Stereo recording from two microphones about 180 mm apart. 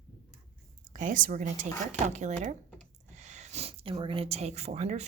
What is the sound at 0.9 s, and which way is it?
A woman's voice, 45° right (ahead or behind).